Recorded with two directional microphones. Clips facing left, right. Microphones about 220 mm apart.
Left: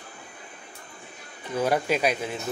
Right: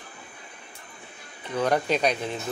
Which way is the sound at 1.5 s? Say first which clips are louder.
Even; 10° left (ahead or behind).